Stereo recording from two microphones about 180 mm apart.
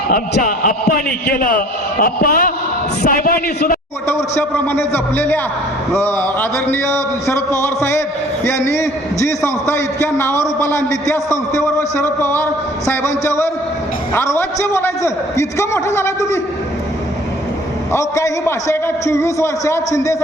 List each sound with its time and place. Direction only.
0.1 s a man's voice: 50° left (ahead or behind)
4.1 s a man's voice: 15° left (ahead or behind)
17.9 s a man's voice: 15° left (ahead or behind)